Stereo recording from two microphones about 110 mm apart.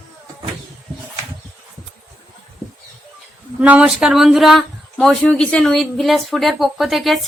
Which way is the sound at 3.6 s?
10° right (ahead or behind).